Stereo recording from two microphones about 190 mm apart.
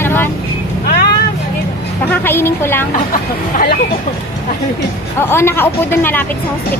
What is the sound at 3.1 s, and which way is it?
Speech, 50° left (ahead or behind).